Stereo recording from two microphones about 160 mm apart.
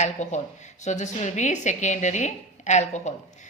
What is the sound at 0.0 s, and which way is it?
A woman's voice, 45° left (ahead or behind).